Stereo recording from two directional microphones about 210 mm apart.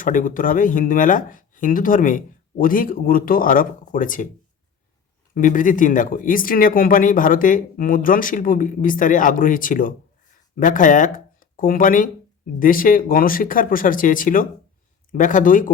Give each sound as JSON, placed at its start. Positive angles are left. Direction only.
{"t": 0.0, "sound": "speech", "side_deg": 40}
{"t": 5.3, "sound": "speech", "side_deg": 40}